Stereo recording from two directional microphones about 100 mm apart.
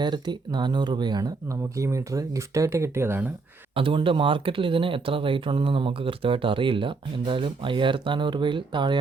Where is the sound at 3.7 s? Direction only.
60° right (ahead or behind).